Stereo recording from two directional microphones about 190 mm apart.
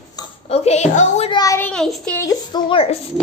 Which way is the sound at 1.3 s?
15° left (ahead or behind).